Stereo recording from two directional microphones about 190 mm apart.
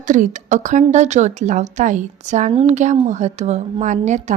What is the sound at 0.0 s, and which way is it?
A woman's voice, 40° right (ahead or behind).